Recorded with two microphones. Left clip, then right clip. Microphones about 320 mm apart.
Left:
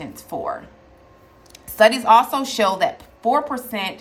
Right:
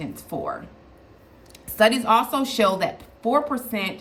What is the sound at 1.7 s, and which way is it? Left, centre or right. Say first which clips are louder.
A woman's voice: left 5 dB; centre.